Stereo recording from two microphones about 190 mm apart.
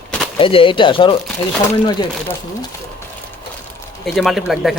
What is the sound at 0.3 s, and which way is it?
Speech, 30° left (ahead or behind).